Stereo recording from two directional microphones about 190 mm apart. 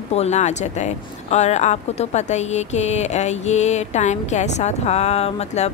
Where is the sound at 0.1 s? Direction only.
35° left (ahead or behind).